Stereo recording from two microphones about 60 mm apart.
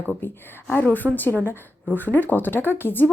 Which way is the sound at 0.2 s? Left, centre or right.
Left.